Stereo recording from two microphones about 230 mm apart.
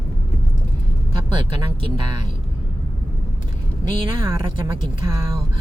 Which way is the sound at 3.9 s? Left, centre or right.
Centre.